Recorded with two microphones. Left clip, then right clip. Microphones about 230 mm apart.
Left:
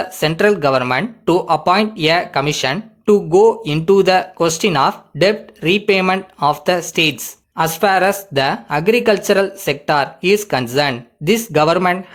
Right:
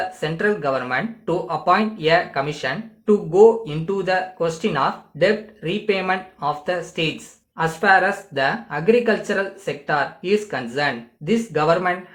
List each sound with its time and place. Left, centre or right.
0.2 s speech: left